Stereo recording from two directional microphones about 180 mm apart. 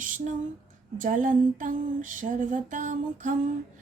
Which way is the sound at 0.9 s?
45° right (ahead or behind).